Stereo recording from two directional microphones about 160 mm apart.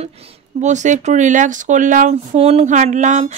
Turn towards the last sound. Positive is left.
turn(degrees=-50)  # may be behind; listen again after turning